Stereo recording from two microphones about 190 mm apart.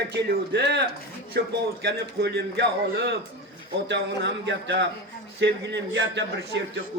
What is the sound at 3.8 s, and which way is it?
A man's voice, 65° right (ahead or behind).